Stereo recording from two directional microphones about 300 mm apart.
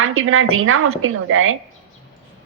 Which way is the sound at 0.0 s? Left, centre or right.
Right.